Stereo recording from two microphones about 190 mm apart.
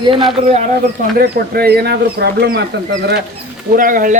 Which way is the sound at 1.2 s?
55° right (ahead or behind).